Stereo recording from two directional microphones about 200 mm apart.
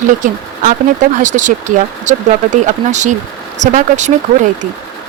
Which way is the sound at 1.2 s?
40° right (ahead or behind).